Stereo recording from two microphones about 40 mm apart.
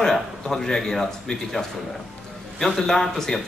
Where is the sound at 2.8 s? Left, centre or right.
Centre.